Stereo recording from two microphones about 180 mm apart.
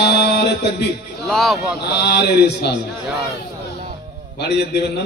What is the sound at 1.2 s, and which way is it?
Speech, centre (ahead or behind).